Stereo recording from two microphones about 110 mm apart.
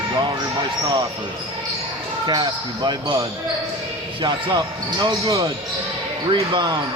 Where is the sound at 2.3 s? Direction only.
35° right (ahead or behind).